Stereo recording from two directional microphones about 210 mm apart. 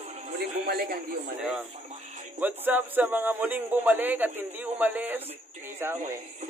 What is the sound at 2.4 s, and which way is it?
A man's voice, 10° right (ahead or behind).